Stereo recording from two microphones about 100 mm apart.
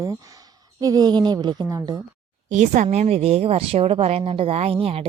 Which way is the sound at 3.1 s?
90° right.